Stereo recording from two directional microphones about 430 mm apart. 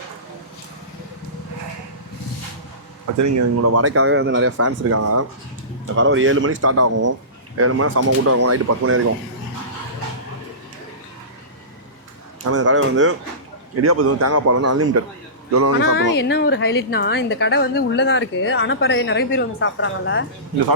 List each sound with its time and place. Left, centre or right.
3.2 s a man's voice: right
12.5 s a man's voice: right
16.1 s a woman's voice: left